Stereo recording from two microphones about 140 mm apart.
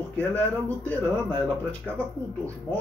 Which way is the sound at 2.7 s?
15° left (ahead or behind).